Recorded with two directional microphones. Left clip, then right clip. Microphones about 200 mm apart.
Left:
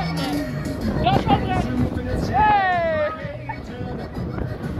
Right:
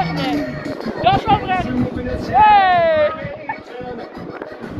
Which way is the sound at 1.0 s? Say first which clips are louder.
Right 5 dB; 15° right (ahead or behind).